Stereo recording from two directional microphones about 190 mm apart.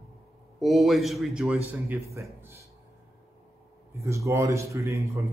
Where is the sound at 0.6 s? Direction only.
Centre (ahead or behind).